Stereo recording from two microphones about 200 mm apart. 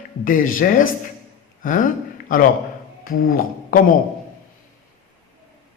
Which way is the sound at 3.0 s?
45° left (ahead or behind).